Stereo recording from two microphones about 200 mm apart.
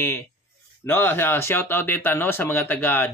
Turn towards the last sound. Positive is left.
turn(degrees=10)  # may be behind; listen again after turning